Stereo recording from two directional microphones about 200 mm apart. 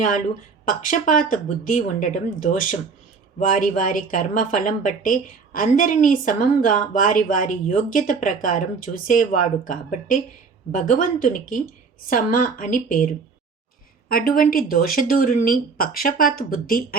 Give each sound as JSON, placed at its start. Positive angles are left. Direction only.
{"t": 0.6, "sound": "speech", "side_deg": 40}
{"t": 14.1, "sound": "speech", "side_deg": 45}